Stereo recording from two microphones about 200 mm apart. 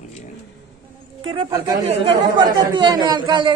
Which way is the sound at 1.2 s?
25° right (ahead or behind).